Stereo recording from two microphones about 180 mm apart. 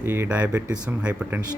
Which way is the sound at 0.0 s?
10° right (ahead or behind).